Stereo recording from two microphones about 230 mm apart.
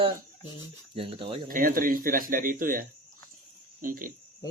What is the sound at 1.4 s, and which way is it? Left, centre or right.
Speech, right.